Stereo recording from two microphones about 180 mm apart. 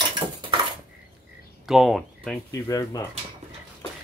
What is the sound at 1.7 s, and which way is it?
Speech, centre (ahead or behind).